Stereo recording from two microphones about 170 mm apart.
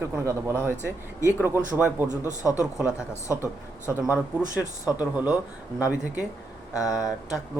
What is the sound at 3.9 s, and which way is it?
Speech, 10° right (ahead or behind).